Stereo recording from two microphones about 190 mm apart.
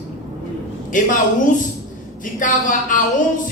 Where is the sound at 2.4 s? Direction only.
45° left (ahead or behind).